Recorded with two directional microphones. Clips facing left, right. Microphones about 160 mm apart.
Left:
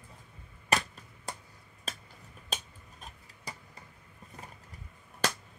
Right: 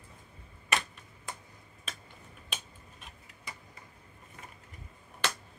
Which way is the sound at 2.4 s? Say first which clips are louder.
Left 5 dB; 40° left (ahead or behind).